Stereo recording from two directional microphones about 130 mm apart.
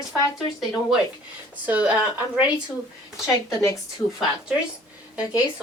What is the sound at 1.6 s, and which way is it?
Speech, 10° right (ahead or behind).